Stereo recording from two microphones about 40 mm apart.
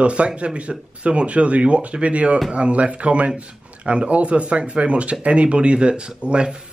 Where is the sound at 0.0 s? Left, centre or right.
Right.